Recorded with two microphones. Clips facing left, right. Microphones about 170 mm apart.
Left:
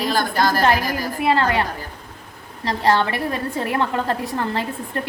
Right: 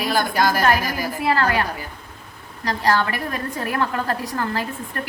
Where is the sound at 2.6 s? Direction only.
25° left (ahead or behind).